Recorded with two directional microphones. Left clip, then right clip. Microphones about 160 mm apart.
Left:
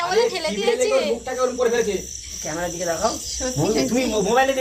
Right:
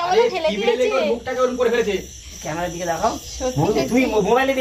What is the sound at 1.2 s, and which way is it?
Speech, 20° left (ahead or behind).